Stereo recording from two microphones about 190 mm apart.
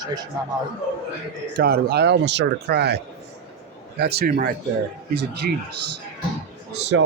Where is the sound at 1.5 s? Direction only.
50° right (ahead or behind).